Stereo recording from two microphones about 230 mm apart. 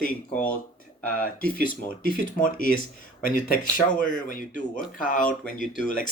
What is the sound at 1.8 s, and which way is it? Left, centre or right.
Speech, left.